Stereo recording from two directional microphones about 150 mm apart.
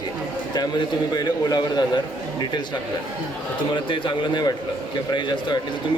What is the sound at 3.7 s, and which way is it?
A man's voice, 30° left (ahead or behind).